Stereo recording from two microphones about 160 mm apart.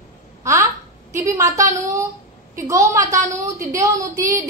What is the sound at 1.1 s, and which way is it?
A woman's voice, 20° right (ahead or behind).